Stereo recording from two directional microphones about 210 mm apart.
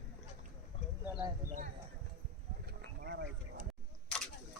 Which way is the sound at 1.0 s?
10° right (ahead or behind).